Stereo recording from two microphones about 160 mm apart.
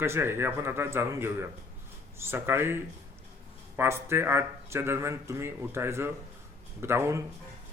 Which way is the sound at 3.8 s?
15° right (ahead or behind).